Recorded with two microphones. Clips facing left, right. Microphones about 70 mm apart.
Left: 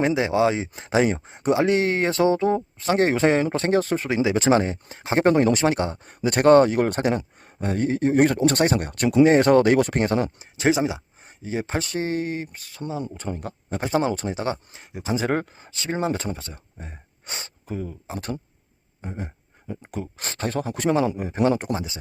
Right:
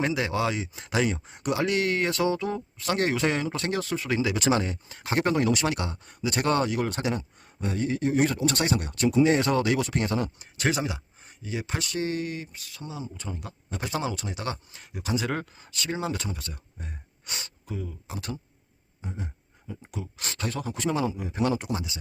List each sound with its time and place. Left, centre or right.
0.0 s speech: left
4.1 s speech: left
6.1 s a man's voice: left
10.3 s speech: left
19.0 s a sound: left
19.9 s speech: left
20.7 s a man's voice: left